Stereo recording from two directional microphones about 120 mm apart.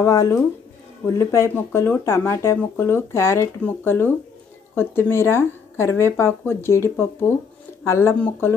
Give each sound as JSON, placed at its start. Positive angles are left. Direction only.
{"t": 0.0, "sound": "speech", "side_deg": 25}